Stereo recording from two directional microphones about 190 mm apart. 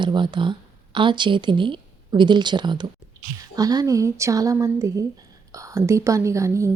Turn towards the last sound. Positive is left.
turn(degrees=-15)  # may be behind; listen again after turning